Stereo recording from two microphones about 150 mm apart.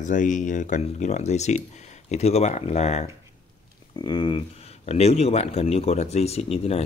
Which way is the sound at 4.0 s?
30° left (ahead or behind).